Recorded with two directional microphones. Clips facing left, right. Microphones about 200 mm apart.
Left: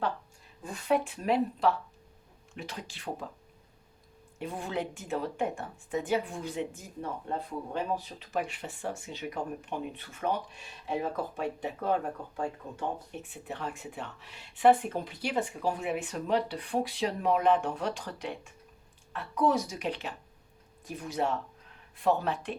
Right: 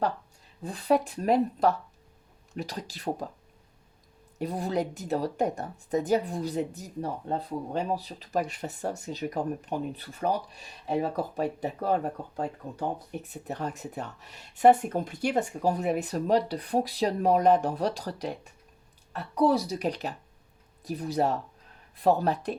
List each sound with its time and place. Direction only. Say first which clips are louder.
0.6 s speech: right 3 dB; 35° right (ahead or behind)
4.4 s speech: right 5 dB; 40° right (ahead or behind)
13.2 s speech: right 4 dB; 40° right (ahead or behind)